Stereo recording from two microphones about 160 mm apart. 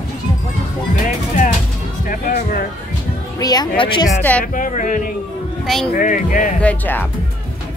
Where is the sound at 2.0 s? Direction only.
60° left (ahead or behind).